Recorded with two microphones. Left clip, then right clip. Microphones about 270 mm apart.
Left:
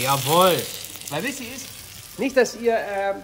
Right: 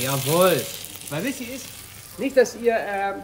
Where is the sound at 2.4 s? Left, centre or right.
Centre.